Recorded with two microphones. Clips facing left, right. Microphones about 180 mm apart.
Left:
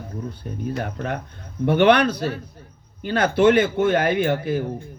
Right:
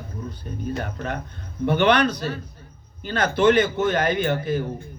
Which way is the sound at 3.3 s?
5° left (ahead or behind).